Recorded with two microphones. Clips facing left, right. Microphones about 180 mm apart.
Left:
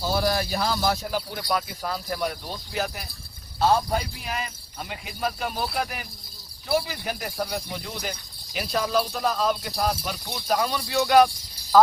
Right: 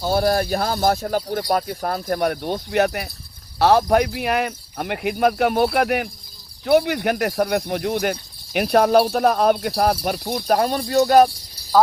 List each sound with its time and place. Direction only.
0.1 s speech: 50° right (ahead or behind)
10.0 s speech: 50° right (ahead or behind)